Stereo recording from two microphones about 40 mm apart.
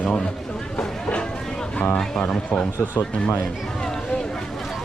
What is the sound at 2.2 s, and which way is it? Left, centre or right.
Speech, left.